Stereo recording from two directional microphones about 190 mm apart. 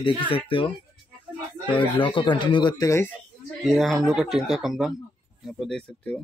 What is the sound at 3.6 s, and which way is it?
Speech, centre (ahead or behind).